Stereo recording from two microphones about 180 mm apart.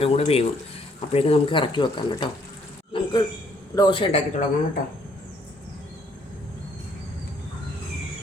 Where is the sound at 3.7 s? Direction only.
25° left (ahead or behind).